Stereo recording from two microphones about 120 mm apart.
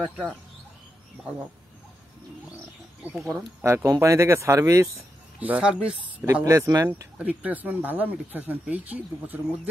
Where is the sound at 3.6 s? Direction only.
25° right (ahead or behind).